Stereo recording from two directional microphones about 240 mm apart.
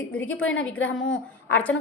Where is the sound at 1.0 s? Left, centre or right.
Left.